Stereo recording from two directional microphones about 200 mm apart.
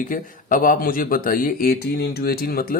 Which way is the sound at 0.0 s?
40° left (ahead or behind).